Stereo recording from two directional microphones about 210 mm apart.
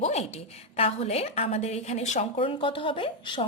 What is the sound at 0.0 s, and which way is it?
A woman's voice, 30° left (ahead or behind).